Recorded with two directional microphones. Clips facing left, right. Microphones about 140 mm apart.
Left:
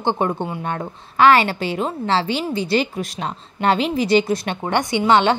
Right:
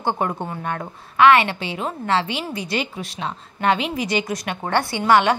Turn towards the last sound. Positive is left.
turn(degrees=25)  # may be behind; listen again after turning